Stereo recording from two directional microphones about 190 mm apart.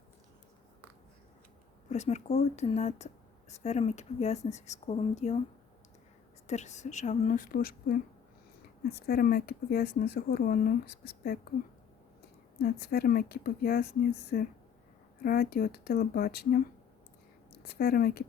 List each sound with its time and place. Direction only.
1.9 s speech: 35° left (ahead or behind)
6.5 s speech: 35° left (ahead or behind); by 11.3 s 55° left (ahead or behind)
12.5 s speech: 55° left (ahead or behind)